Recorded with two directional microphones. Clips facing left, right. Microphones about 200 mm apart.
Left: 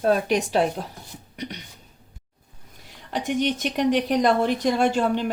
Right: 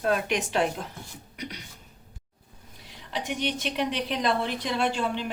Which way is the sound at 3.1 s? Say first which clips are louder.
Left 6 dB; 45° left (ahead or behind).